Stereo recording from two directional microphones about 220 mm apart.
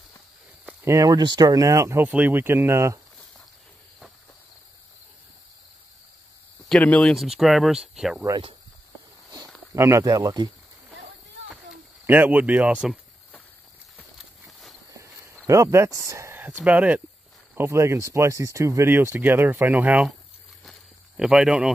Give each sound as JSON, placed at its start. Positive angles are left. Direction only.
{"t": 0.7, "sound": "speech", "side_deg": -15}
{"t": 6.7, "sound": "speech", "side_deg": 5}
{"t": 8.3, "sound": "speech", "side_deg": -25}
{"t": 9.8, "sound": "speech", "side_deg": -15}
{"t": 11.4, "sound": "a sound", "side_deg": -5}
{"t": 14.9, "sound": "a sound", "side_deg": -15}
{"t": 15.4, "sound": "speech", "side_deg": -15}
{"t": 21.2, "sound": "speech", "side_deg": -5}